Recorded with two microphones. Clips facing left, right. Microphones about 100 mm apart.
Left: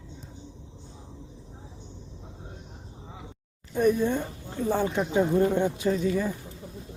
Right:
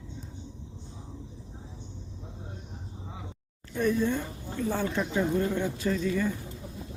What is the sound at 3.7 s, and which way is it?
Speech, 20° left (ahead or behind).